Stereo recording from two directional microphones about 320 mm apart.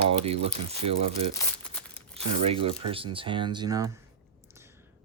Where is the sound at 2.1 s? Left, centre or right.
Centre.